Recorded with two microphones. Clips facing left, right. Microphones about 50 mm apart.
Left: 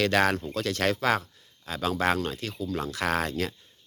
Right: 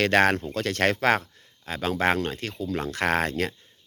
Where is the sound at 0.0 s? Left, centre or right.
Right.